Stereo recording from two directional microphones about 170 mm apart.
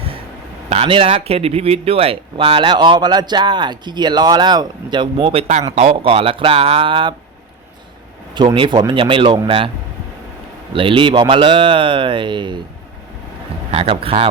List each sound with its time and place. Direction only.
0.7 s speech: 35° right (ahead or behind)
8.4 s speech: 30° right (ahead or behind)
10.8 s speech: 30° right (ahead or behind)
13.7 s speech: 35° right (ahead or behind)